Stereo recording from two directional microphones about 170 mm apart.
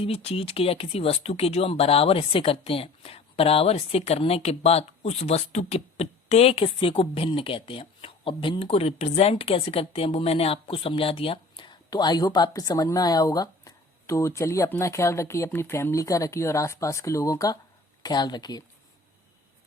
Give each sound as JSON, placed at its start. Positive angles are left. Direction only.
{"t": 0.0, "sound": "speech", "side_deg": 35}